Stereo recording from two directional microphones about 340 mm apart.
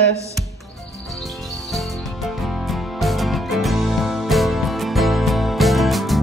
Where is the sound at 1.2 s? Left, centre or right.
Centre.